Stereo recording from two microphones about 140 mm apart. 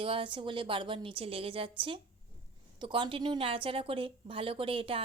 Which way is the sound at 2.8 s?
35° right (ahead or behind).